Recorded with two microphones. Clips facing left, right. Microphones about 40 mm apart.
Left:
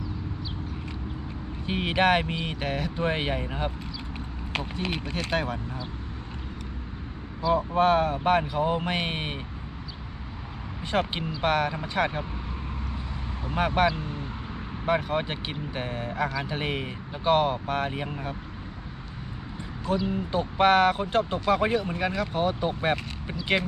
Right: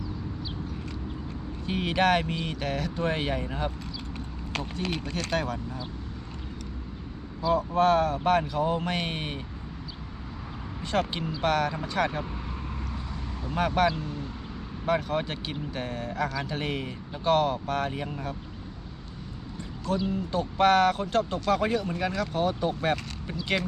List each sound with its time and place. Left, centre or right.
1.6 s speech: left
7.5 s speech: centre
10.9 s speech: centre
13.5 s speech: left
20.1 s speech: left